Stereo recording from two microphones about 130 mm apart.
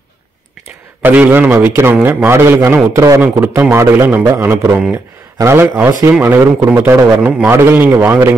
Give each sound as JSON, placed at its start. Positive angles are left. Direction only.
{"t": 1.0, "sound": "a man's voice", "side_deg": -15}
{"t": 3.2, "sound": "a man's voice", "side_deg": -15}